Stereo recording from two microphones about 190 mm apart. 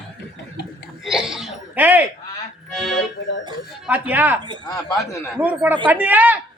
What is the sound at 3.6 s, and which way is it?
Speech, 5° right (ahead or behind).